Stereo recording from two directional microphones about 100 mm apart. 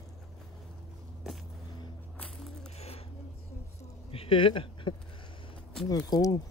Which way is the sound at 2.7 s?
90° left.